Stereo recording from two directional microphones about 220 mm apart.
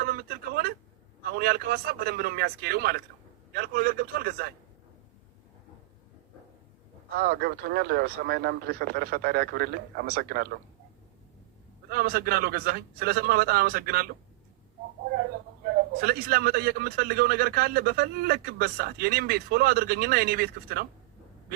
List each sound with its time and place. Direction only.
0.1 s a sound: 45° right (ahead or behind)
1.2 s a man's voice: 45° right (ahead or behind)
7.2 s a man's voice: 45° right (ahead or behind)
11.9 s a man's voice: 45° right (ahead or behind)
16.0 s a man's voice: 45° right (ahead or behind)